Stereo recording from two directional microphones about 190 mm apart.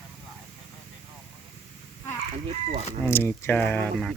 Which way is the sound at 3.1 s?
10° left (ahead or behind).